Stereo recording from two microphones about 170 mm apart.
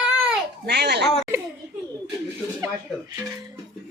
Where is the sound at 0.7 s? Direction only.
75° right (ahead or behind).